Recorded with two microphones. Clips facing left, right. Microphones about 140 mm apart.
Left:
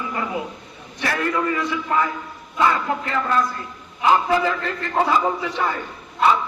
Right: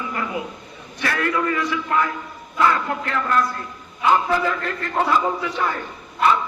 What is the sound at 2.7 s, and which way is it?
Speech, 5° left (ahead or behind).